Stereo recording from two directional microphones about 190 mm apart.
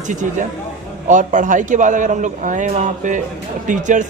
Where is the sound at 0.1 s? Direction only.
40° right (ahead or behind).